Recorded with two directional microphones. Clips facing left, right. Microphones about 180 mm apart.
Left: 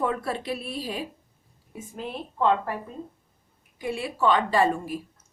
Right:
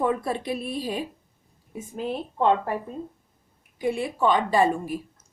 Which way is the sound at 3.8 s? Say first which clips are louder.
Right 3 dB; 20° right (ahead or behind).